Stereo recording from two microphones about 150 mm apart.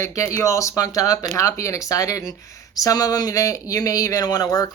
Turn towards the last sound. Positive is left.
turn(degrees=25)  # may be behind; listen again after turning